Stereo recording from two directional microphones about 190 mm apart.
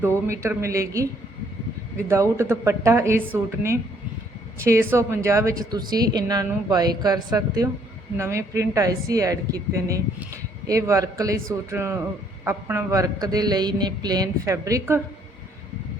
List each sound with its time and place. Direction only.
0.3 s a woman's voice: 15° right (ahead or behind)